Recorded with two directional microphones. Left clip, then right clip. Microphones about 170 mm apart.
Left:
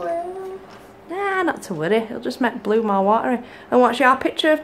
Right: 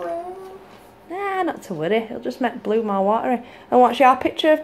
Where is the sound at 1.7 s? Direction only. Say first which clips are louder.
Left 1 dB; 5° right (ahead or behind).